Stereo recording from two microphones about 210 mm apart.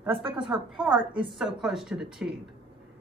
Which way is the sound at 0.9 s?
25° right (ahead or behind).